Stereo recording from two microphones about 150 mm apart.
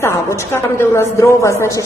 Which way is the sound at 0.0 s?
20° left (ahead or behind).